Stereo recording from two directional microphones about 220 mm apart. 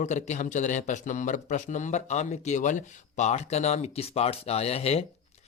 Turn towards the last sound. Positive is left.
turn(degrees=25)  # may be behind; listen again after turning